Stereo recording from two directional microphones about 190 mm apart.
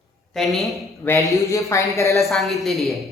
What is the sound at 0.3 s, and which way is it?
Speech, centre (ahead or behind).